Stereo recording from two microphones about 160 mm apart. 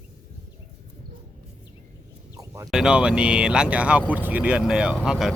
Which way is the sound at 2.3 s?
20° right (ahead or behind).